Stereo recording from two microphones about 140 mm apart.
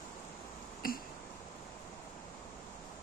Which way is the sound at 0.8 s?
90° left.